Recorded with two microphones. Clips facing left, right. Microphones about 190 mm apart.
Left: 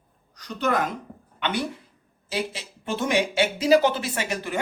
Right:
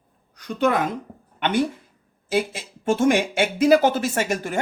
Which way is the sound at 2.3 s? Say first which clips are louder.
Right 6 dB; 50° right (ahead or behind).